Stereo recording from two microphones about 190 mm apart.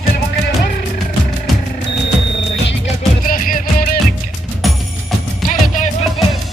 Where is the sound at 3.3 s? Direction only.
45° left (ahead or behind).